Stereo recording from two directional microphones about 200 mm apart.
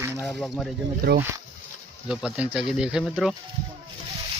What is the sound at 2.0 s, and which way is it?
Speech, 5° right (ahead or behind).